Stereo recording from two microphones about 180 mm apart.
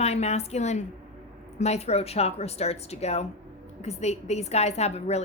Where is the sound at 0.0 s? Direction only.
35° left (ahead or behind).